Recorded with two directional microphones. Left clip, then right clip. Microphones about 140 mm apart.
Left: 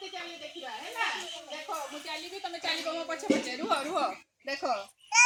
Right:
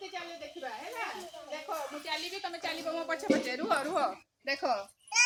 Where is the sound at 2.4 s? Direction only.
10° right (ahead or behind).